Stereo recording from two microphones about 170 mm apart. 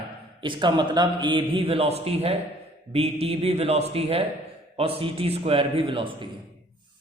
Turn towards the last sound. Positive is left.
turn(degrees=-30)  # may be behind; listen again after turning